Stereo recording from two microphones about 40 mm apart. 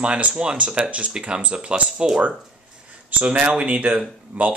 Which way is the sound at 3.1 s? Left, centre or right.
Right.